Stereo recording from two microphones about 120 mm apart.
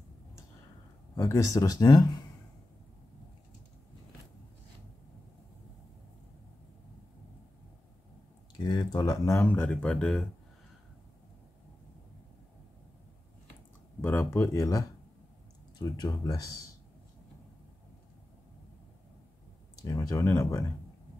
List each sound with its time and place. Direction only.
1.1 s speech: 25° left (ahead or behind)
8.5 s speech: 35° left (ahead or behind); by 10.2 s 5° left (ahead or behind)
14.0 s speech: 20° left (ahead or behind)
19.8 s speech: 30° left (ahead or behind)